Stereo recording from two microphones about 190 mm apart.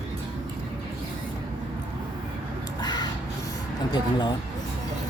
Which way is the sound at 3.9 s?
20° left (ahead or behind).